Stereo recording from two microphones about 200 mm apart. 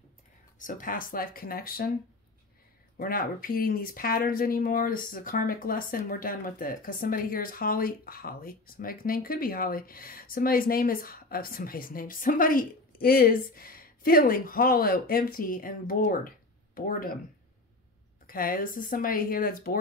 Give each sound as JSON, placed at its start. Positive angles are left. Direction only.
{"t": 0.6, "sound": "speech", "side_deg": 40}
{"t": 3.0, "sound": "speech", "side_deg": 45}
{"t": 18.2, "sound": "speech", "side_deg": 45}